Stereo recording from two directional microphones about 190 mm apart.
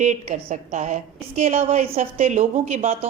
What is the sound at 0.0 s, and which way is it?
A woman's voice, 40° right (ahead or behind).